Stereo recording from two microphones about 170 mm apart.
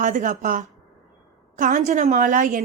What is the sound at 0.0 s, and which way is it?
A woman's voice, 50° right (ahead or behind).